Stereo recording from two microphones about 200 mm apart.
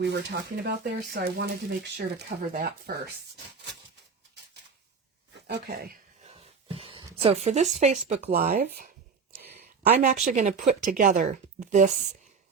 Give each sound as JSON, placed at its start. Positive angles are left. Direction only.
{"t": 0.0, "sound": "speech", "side_deg": -55}
{"t": 5.5, "sound": "speech", "side_deg": -50}
{"t": 6.2, "sound": "a sound", "side_deg": -30}
{"t": 7.8, "sound": "speech", "side_deg": -35}
{"t": 10.0, "sound": "speech", "side_deg": -40}